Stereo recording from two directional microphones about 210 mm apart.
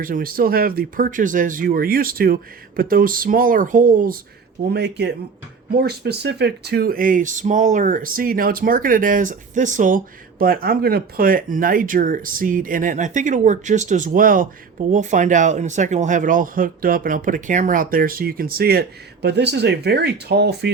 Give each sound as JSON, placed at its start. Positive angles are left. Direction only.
{"t": 0.0, "sound": "speech", "side_deg": -40}
{"t": 4.7, "sound": "speech", "side_deg": -55}